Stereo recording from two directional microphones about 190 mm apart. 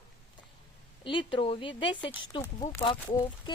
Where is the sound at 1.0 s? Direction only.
25° left (ahead or behind).